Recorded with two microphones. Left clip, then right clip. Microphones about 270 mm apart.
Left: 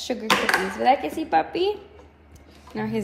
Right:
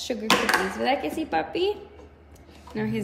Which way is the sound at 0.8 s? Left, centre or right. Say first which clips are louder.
Left 5 dB; centre.